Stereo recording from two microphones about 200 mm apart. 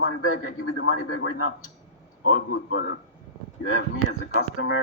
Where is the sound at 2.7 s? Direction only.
90° left.